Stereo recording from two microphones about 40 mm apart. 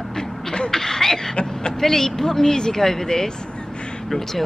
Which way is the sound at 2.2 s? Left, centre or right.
Centre.